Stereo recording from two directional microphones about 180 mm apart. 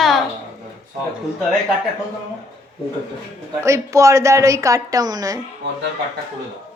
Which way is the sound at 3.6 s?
15° right (ahead or behind).